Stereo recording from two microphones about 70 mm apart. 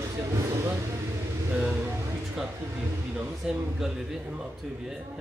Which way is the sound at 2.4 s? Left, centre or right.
Centre.